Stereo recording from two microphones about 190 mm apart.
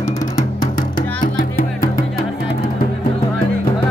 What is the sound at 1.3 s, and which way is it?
Music, 50° left (ahead or behind).